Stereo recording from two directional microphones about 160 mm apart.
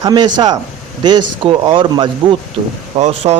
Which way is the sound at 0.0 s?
25° right (ahead or behind).